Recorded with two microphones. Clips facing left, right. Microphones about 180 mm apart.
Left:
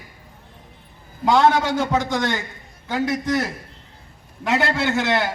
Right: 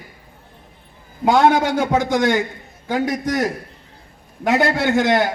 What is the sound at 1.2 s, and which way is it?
A man's voice, 50° right (ahead or behind).